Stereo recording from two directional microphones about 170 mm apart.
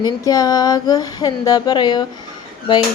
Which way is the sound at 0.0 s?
20° left (ahead or behind).